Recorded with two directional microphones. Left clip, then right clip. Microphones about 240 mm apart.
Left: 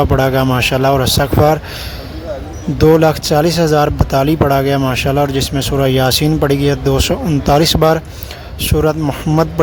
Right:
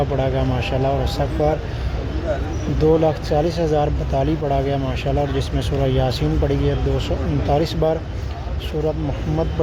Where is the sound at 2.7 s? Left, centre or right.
Left.